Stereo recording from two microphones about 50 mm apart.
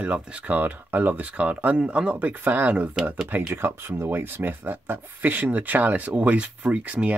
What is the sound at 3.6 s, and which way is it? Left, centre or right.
Speech, right.